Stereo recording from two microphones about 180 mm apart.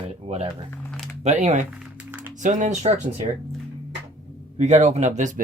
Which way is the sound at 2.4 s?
45° right (ahead or behind).